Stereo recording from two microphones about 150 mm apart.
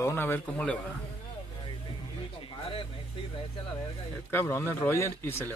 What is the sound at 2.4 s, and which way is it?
Speech, 35° left (ahead or behind).